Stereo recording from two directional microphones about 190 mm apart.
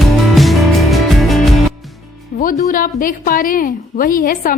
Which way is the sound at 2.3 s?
45° left (ahead or behind).